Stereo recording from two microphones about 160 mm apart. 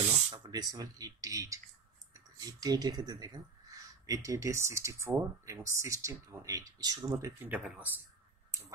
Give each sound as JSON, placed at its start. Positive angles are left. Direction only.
{"t": 0.3, "sound": "speech", "side_deg": -25}